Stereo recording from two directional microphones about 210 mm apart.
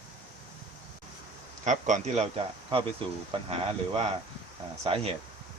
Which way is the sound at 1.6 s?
35° right (ahead or behind).